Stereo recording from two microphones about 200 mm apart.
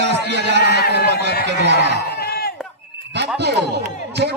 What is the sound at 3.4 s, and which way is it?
Speech, 60° right (ahead or behind).